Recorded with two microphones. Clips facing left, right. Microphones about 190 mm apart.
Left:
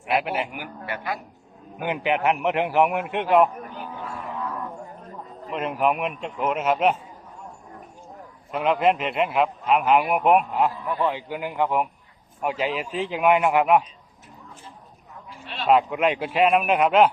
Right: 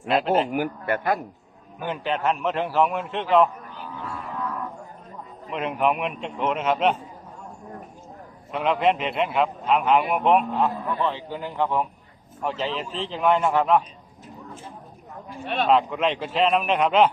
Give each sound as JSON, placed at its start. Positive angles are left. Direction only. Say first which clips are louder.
{"t": 0.0, "sound": "a man's voice", "louder": "right 4 dB", "side_deg": 10}
{"t": 0.5, "sound": "a man's voice", "louder": "right 9 dB", "side_deg": -50}
{"t": 1.8, "sound": "a man's voice", "louder": "left 2 dB", "side_deg": 15}
{"t": 5.5, "sound": "a man's voice", "louder": "even", "side_deg": 0}
{"t": 8.5, "sound": "a man's voice", "louder": "left 1 dB", "side_deg": 5}
{"t": 15.3, "sound": "speech", "louder": "right 3 dB", "side_deg": -55}
{"t": 15.7, "sound": "a man's voice", "louder": "left 3 dB", "side_deg": 10}